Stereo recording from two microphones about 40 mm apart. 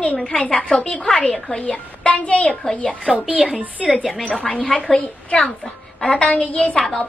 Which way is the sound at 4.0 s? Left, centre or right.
Centre.